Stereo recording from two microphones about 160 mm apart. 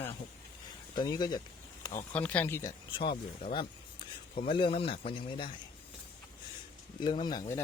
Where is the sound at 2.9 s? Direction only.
35° left (ahead or behind).